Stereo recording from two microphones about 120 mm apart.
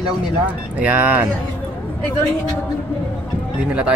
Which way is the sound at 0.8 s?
15° right (ahead or behind).